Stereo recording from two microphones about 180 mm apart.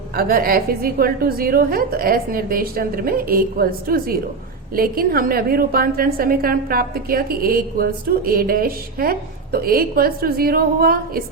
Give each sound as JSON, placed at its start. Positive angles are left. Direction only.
{"t": 0.2, "sound": "a woman's voice", "side_deg": -55}